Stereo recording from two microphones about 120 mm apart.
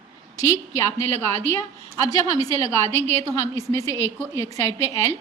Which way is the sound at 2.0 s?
30° left (ahead or behind).